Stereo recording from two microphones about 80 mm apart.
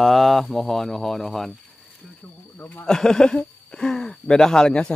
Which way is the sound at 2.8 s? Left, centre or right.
Centre.